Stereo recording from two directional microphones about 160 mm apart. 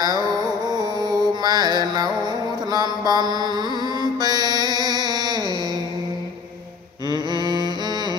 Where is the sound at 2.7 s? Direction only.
25° right (ahead or behind).